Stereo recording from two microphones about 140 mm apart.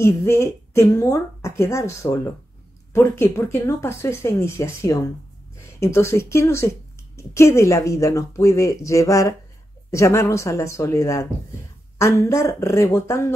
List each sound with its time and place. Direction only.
0.0 s speech: 20° left (ahead or behind)